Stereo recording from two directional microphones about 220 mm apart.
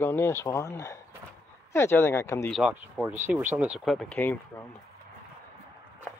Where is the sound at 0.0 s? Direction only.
10° left (ahead or behind).